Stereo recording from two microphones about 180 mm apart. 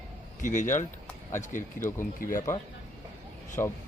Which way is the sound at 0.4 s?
45° left (ahead or behind).